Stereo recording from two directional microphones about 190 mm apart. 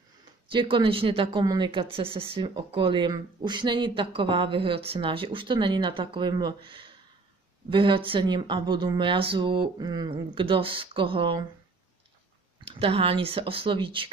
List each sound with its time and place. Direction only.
0.5 s speech: 25° right (ahead or behind)
12.6 s speech: 30° right (ahead or behind)